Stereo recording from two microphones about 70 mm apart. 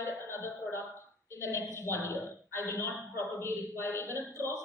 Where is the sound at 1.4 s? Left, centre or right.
Left.